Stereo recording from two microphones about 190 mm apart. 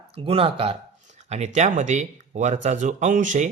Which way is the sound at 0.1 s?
30° right (ahead or behind).